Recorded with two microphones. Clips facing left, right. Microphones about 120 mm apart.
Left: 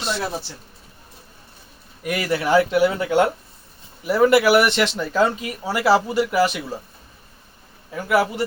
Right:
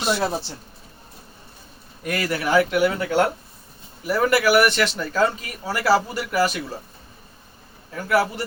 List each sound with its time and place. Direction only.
0.2 s speech: 30° right (ahead or behind)
2.0 s speech: 20° left (ahead or behind)
7.9 s speech: 20° left (ahead or behind)